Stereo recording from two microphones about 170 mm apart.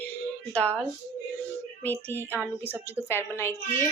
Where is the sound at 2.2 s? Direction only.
10° right (ahead or behind).